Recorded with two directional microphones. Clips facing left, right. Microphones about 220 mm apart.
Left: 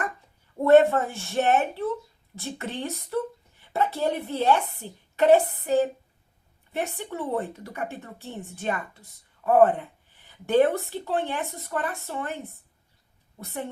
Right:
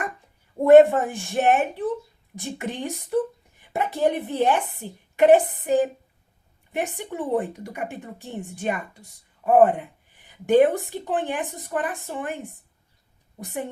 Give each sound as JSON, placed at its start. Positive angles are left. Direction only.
{"t": 0.6, "sound": "a woman's voice", "side_deg": -15}